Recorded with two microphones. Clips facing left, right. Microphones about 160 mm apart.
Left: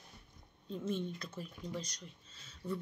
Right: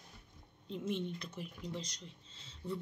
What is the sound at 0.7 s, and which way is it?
Speech, 20° right (ahead or behind).